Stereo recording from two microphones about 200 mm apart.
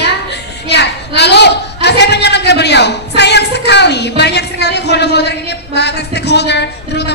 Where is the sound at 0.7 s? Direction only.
55° left (ahead or behind).